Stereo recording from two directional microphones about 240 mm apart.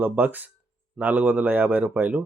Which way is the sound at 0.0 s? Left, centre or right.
Centre.